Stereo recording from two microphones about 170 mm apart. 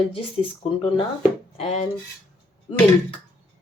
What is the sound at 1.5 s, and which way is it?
Speech, 35° left (ahead or behind).